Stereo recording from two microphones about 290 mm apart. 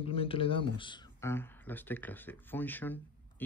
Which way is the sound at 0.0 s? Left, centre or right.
Centre.